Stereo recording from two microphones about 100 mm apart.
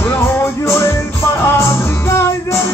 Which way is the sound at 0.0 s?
25° left (ahead or behind).